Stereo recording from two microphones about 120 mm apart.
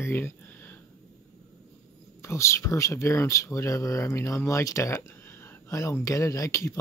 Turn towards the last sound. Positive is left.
turn(degrees=25)  # may be behind; listen again after turning